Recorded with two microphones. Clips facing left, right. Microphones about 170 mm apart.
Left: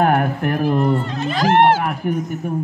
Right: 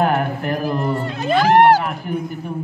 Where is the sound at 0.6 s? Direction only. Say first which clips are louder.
Left 5 dB; 40° right (ahead or behind).